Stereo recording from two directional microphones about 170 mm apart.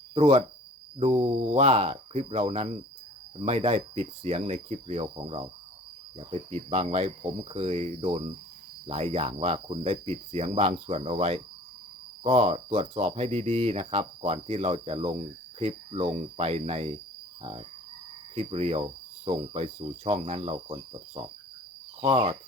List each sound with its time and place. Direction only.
0.1 s speech: 35° right (ahead or behind)
22.0 s speech: 35° right (ahead or behind)